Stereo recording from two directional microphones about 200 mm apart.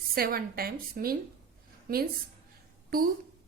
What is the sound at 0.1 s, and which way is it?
A woman's voice, 50° right (ahead or behind).